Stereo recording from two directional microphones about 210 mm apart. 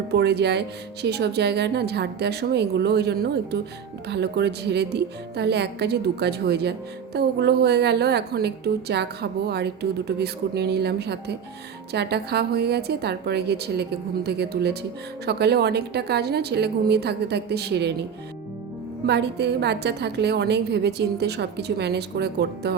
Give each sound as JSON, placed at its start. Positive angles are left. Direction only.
{"t": 0.1, "sound": "speech", "side_deg": -55}
{"t": 19.0, "sound": "speech", "side_deg": -55}